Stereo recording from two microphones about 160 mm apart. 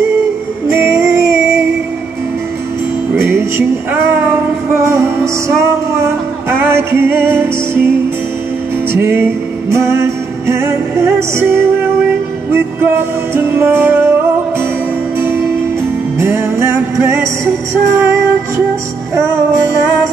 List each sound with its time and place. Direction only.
0.7 s music: 15° right (ahead or behind)
3.2 s music: 15° right (ahead or behind)
8.9 s music: 15° right (ahead or behind)
13.3 s music: 15° right (ahead or behind)
15.1 s music: 15° right (ahead or behind)